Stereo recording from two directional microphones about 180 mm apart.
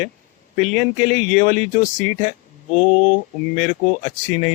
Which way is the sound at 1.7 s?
45° left (ahead or behind).